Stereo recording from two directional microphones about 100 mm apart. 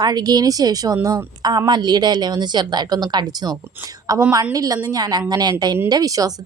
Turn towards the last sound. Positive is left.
turn(degrees=-35)  # may be behind; listen again after turning